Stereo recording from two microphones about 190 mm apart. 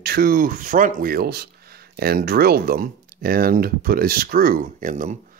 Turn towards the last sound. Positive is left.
turn(degrees=-45)  # may be behind; listen again after turning